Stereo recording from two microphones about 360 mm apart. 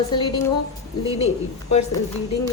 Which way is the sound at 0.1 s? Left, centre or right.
Centre.